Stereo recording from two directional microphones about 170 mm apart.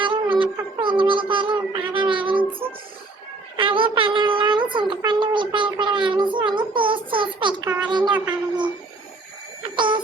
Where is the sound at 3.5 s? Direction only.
30° right (ahead or behind).